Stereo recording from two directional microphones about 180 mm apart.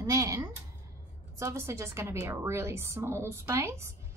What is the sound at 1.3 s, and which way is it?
Speech, 15° right (ahead or behind).